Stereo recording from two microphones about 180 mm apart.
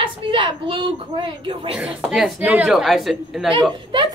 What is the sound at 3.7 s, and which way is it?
Speech, 25° right (ahead or behind).